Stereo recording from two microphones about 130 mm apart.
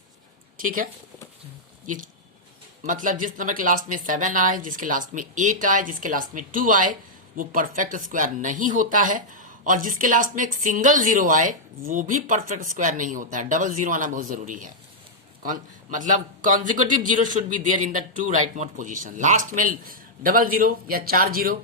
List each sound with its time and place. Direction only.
0.6 s speech: 90° right
1.9 s speech: 90° right